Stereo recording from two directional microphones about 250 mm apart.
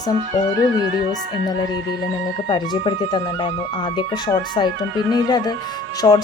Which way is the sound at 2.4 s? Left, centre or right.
Centre.